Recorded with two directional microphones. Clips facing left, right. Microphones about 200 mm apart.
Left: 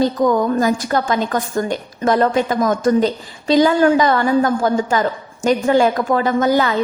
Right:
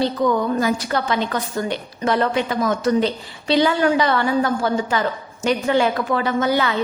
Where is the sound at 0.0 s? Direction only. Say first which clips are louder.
Left 4 dB; 45° left (ahead or behind).